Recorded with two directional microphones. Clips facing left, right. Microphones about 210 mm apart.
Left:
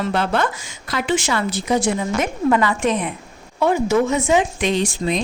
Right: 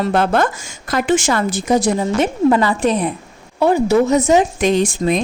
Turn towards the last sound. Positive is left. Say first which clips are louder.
# right 5 dB
turn(degrees=-50)  # may be behind; listen again after turning